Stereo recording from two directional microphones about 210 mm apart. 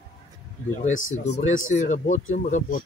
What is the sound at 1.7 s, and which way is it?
Speech, 35° left (ahead or behind).